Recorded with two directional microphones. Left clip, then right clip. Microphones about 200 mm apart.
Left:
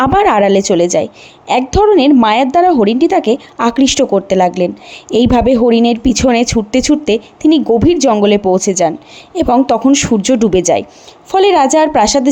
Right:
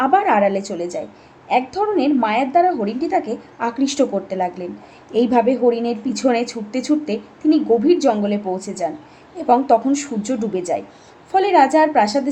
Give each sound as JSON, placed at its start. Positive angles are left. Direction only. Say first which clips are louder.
{"t": 0.0, "sound": "a woman's voice", "louder": "left 6 dB", "side_deg": 40}